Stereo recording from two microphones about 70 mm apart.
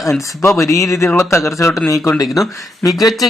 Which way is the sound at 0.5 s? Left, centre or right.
Left.